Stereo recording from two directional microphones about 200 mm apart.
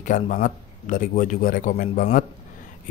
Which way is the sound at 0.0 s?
40° left (ahead or behind).